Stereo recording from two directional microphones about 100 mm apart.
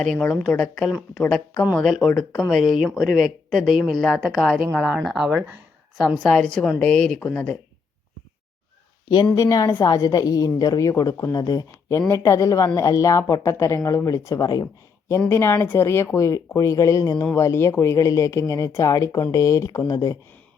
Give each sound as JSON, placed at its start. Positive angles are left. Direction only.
{"t": 0.0, "sound": "a woman's voice", "side_deg": 10}
{"t": 1.2, "sound": "speech", "side_deg": 20}
{"t": 1.7, "sound": "a woman's voice", "side_deg": 5}
{"t": 9.3, "sound": "a woman's voice", "side_deg": 35}
{"t": 15.3, "sound": "a woman's voice", "side_deg": 25}